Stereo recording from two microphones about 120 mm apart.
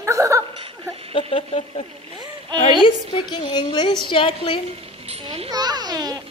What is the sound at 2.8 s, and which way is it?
A woman's voice, 40° left (ahead or behind).